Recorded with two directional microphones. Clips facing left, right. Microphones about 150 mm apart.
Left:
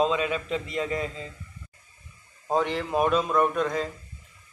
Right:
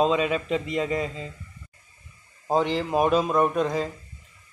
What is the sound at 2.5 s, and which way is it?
Speech, 30° right (ahead or behind).